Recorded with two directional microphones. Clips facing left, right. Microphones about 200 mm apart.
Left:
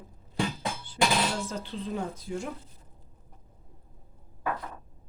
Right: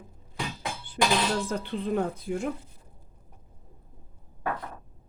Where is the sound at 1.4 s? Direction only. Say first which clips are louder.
Right 5 dB; 55° right (ahead or behind).